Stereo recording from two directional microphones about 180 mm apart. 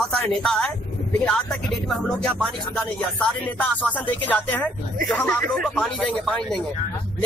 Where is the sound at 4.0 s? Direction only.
10° left (ahead or behind).